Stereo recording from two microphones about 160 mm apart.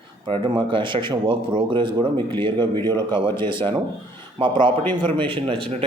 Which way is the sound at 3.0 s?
30° right (ahead or behind).